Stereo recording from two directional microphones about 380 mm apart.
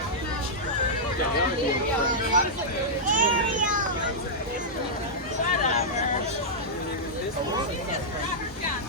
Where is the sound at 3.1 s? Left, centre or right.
Right.